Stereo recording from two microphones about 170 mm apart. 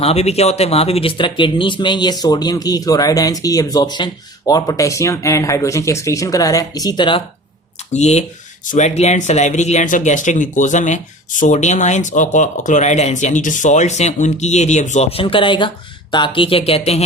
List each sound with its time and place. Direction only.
0.0 s speech: 40° left (ahead or behind)
7.9 s speech: 40° left (ahead or behind)